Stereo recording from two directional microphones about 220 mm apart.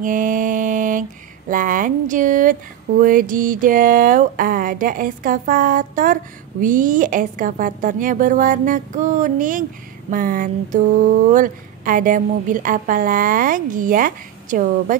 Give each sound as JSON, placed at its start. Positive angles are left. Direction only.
{"t": 0.0, "sound": "mantra", "side_deg": -35}